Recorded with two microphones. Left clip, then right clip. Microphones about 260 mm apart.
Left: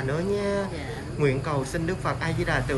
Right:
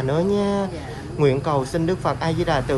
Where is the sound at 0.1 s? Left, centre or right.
Centre.